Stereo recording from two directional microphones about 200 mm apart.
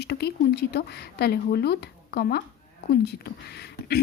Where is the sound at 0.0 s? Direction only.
55° left (ahead or behind).